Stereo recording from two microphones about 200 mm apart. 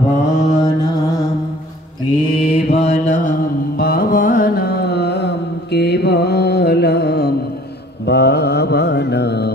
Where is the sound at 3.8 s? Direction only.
50° left (ahead or behind).